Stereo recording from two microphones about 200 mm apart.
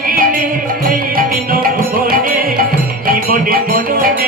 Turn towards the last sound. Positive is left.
turn(degrees=-45)  # may be behind; listen again after turning